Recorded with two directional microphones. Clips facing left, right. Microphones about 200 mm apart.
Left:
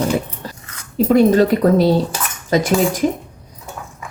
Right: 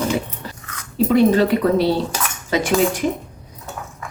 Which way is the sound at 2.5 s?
40° left (ahead or behind).